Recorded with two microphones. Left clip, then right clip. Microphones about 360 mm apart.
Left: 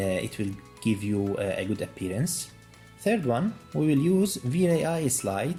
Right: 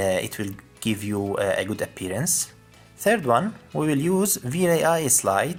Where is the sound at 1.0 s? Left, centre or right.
Right.